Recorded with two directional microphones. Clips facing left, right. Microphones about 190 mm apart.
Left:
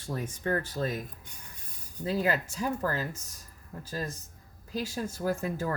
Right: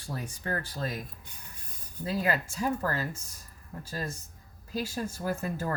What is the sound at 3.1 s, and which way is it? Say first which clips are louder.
Speech: right 1 dB; 40° left (ahead or behind).